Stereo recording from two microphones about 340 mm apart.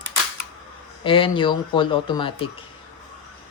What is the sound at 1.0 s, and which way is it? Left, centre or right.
Speech, centre.